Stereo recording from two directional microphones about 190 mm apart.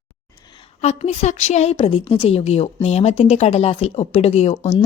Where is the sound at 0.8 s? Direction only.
35° left (ahead or behind).